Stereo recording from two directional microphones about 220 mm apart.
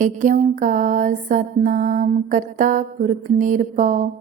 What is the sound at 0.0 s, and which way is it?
Music, 35° right (ahead or behind).